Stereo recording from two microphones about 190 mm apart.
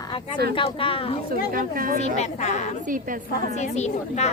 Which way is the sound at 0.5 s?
30° left (ahead or behind).